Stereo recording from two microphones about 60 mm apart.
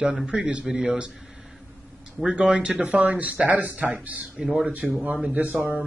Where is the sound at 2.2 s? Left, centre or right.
Centre.